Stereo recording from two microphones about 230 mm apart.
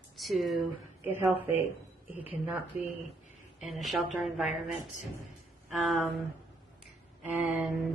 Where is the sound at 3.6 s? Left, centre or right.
Centre.